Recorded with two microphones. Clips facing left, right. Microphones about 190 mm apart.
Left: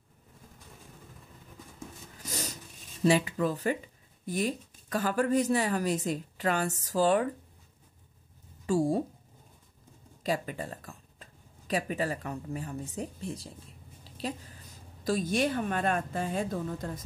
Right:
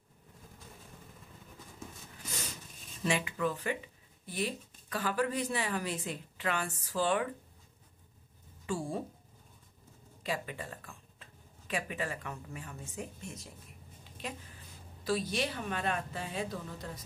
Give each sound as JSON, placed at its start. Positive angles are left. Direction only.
{"t": 2.2, "sound": "a sound", "side_deg": 40}
{"t": 4.3, "sound": "a woman's voice", "side_deg": 45}
{"t": 8.6, "sound": "speech", "side_deg": 40}
{"t": 10.2, "sound": "speech", "side_deg": 40}
{"t": 14.0, "sound": "a sound", "side_deg": 35}
{"t": 15.0, "sound": "a woman's voice", "side_deg": 45}